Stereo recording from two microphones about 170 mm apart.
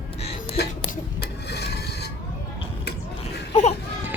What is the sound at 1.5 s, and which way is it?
Printer, 75° left (ahead or behind).